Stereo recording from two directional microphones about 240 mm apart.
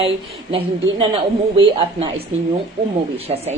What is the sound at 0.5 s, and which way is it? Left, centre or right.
Speech, right.